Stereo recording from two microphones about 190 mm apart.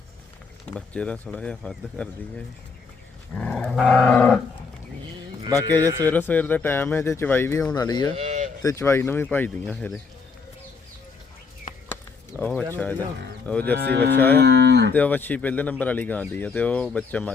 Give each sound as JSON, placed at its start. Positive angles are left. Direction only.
{"t": 0.7, "sound": "speech", "side_deg": 5}
{"t": 3.3, "sound": "dog", "side_deg": 5}
{"t": 5.8, "sound": "a man's voice", "side_deg": -15}
{"t": 6.1, "sound": "speech", "side_deg": 10}
{"t": 8.1, "sound": "a sound", "side_deg": -40}
{"t": 8.6, "sound": "speech", "side_deg": 15}
{"t": 12.4, "sound": "speech", "side_deg": 10}
{"t": 13.7, "sound": "cattle", "side_deg": -60}
{"t": 14.9, "sound": "speech", "side_deg": 10}